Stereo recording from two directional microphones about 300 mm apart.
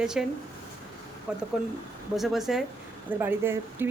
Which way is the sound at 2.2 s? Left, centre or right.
Centre.